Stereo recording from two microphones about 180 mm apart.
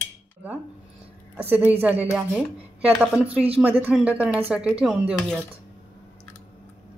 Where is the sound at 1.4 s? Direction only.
10° right (ahead or behind).